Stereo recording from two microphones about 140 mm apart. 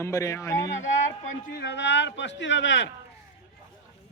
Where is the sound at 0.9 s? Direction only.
60° left (ahead or behind).